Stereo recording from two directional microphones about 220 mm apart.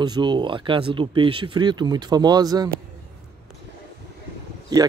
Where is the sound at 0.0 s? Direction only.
20° right (ahead or behind).